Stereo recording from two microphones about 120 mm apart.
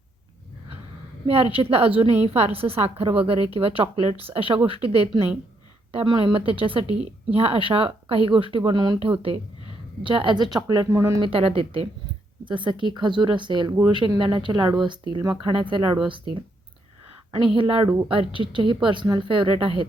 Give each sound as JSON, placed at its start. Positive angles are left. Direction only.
{"t": 1.3, "sound": "a woman's voice", "side_deg": -55}
{"t": 10.8, "sound": "speech", "side_deg": -25}
{"t": 11.2, "sound": "a woman's voice", "side_deg": -50}
{"t": 15.5, "sound": "a woman's voice", "side_deg": -45}
{"t": 17.5, "sound": "a woman's voice", "side_deg": -45}